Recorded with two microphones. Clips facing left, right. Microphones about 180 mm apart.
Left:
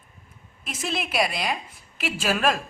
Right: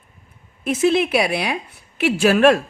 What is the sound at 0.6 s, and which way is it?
A woman's voice, 60° right (ahead or behind).